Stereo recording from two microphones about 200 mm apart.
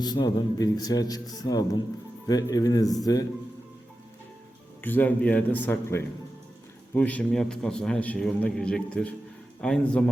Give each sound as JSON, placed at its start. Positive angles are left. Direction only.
{"t": 0.0, "sound": "a man's voice", "side_deg": 20}
{"t": 4.8, "sound": "a man's voice", "side_deg": 10}